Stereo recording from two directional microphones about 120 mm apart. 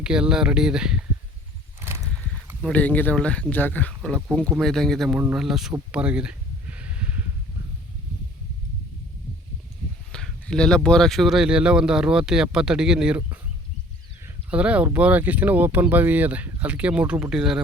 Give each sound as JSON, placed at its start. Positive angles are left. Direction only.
{"t": 0.0, "sound": "speech", "side_deg": -5}
{"t": 1.8, "sound": "a sound", "side_deg": -20}
{"t": 2.7, "sound": "speech", "side_deg": 15}
{"t": 4.6, "sound": "speech", "side_deg": 5}
{"t": 5.9, "sound": "a sound", "side_deg": -10}
{"t": 10.1, "sound": "speech", "side_deg": 5}
{"t": 14.5, "sound": "speech", "side_deg": -10}